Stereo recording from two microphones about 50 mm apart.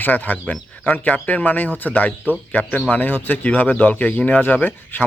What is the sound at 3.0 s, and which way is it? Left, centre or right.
Speech, left.